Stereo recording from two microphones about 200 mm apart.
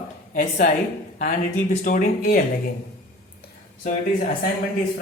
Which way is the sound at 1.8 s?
40° left (ahead or behind).